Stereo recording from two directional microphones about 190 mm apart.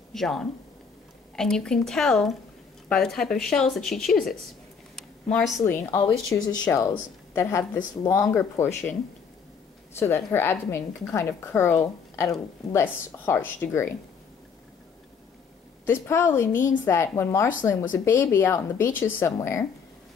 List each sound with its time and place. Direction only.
0.1 s speech: 5° left (ahead or behind)
4.9 s a sound: centre (ahead or behind)
6.3 s a woman's voice: 10° left (ahead or behind)
9.9 s a woman's voice: 10° left (ahead or behind)
15.9 s a woman's voice: 15° left (ahead or behind)